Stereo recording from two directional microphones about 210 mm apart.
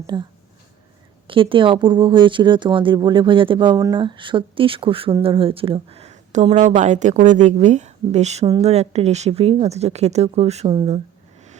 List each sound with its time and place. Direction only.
0.1 s speech: 20° right (ahead or behind)
1.3 s speech: 25° right (ahead or behind)